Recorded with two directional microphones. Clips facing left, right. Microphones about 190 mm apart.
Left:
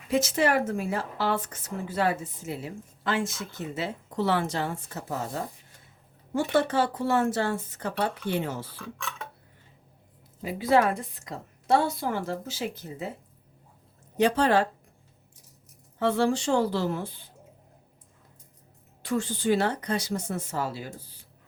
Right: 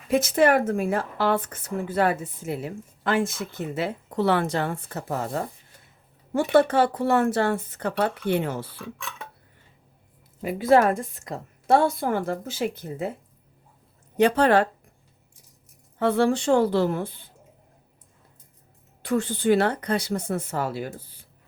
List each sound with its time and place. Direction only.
0.1 s speech: 55° right (ahead or behind)
8.7 s speech: 5° right (ahead or behind)
10.4 s a woman's voice: 50° right (ahead or behind)
14.2 s speech: 60° right (ahead or behind)
16.0 s speech: 55° right (ahead or behind)
19.0 s speech: 60° right (ahead or behind)